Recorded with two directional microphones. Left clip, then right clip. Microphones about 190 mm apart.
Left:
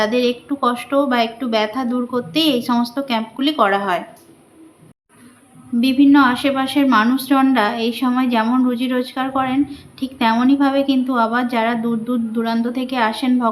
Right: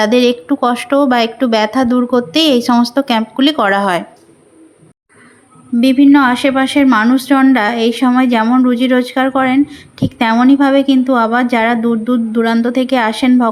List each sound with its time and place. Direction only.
0.0 s speech: 45° right (ahead or behind)
5.8 s speech: 30° right (ahead or behind)